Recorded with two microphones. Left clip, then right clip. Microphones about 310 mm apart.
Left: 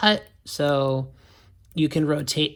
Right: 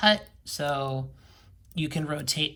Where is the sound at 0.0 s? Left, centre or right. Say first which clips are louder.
Left 2 dB; centre.